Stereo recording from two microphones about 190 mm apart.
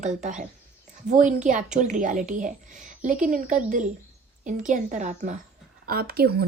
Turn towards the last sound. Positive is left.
turn(degrees=-55)  # may be behind; listen again after turning